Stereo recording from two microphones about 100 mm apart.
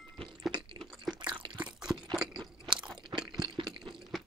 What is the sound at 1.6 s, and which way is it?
Crunch, 5° right (ahead or behind).